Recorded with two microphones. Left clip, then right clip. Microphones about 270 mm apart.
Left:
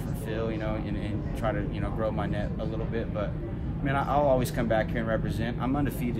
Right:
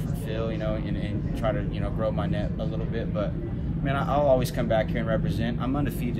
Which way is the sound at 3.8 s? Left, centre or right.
Centre.